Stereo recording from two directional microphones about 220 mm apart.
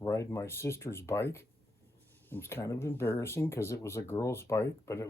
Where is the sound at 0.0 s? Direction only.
10° left (ahead or behind).